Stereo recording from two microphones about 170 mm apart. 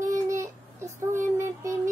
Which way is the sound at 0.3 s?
15° right (ahead or behind).